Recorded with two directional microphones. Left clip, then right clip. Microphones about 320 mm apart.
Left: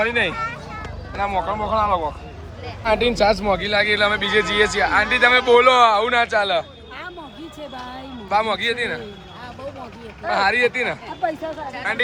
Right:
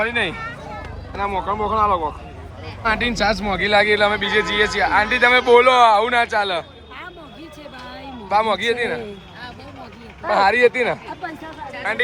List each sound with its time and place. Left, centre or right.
0.0 s speech: centre
2.9 s speech: centre
3.6 s speech: centre
8.3 s speech: centre
10.2 s speech: centre